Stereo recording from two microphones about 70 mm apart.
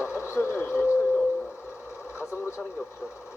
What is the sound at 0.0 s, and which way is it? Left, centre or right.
Radio, left.